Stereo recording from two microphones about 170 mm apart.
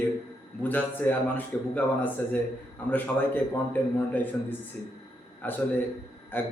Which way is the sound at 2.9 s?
10° left (ahead or behind).